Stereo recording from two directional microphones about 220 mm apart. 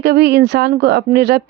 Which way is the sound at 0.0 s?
50° right (ahead or behind).